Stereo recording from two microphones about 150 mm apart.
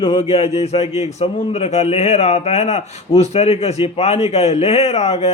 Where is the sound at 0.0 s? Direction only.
40° left (ahead or behind).